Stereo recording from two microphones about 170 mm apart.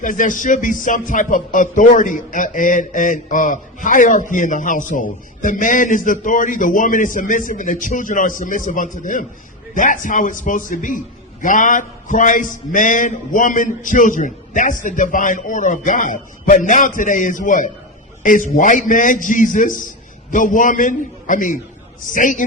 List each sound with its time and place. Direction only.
0.0 s speech: 50° left (ahead or behind)